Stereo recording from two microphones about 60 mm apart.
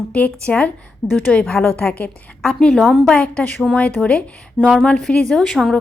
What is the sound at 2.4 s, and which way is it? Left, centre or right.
Speech, centre.